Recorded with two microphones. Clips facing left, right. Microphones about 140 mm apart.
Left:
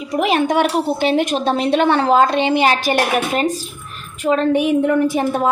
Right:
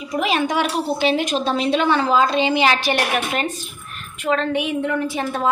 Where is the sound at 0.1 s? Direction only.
55° left (ahead or behind).